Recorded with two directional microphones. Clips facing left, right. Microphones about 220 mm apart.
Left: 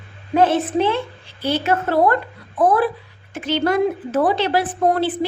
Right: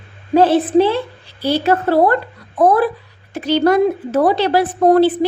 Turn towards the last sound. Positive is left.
turn(degrees=-40)  # may be behind; listen again after turning